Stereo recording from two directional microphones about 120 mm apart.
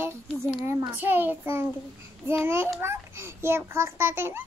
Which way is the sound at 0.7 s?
15° right (ahead or behind).